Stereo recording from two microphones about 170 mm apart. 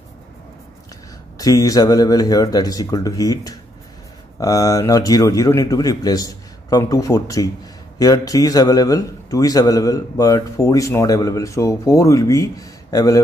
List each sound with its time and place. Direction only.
1.4 s a man's voice: 20° left (ahead or behind)